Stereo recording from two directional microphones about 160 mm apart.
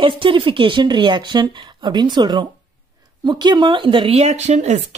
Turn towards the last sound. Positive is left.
turn(degrees=-45)  # may be behind; listen again after turning